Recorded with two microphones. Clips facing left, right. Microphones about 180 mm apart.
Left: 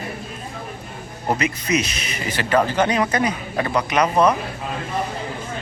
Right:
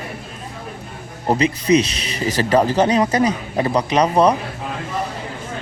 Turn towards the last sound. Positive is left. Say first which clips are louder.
# right 2 dB
turn(degrees=-35)  # may be behind; listen again after turning